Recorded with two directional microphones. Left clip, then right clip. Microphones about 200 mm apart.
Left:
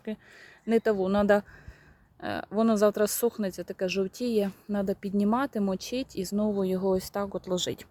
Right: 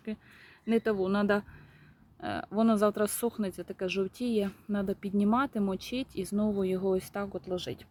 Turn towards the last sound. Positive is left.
turn(degrees=35)  # may be behind; listen again after turning